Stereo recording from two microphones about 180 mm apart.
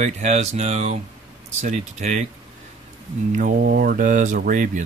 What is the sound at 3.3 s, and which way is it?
Speech, 55° right (ahead or behind).